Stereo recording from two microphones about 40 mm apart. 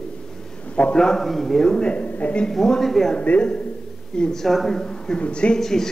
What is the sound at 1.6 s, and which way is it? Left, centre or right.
A man's voice, centre.